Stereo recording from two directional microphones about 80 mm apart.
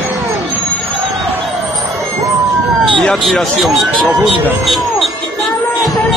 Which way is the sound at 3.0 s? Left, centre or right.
Centre.